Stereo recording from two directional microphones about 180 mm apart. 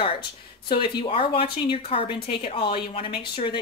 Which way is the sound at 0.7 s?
25° left (ahead or behind).